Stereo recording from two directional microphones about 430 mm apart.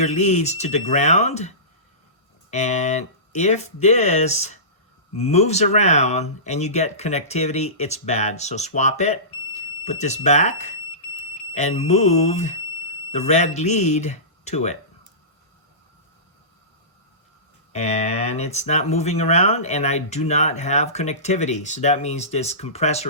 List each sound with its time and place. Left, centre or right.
0.0 s speech: centre
11.9 s speech: centre
17.7 s speech: centre